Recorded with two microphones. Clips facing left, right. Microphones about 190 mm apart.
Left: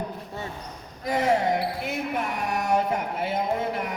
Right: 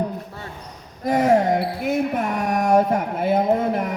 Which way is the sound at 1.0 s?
50° right (ahead or behind).